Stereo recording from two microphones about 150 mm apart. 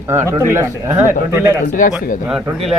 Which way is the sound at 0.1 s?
20° right (ahead or behind).